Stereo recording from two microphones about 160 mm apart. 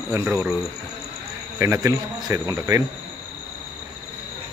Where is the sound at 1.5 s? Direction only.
20° right (ahead or behind).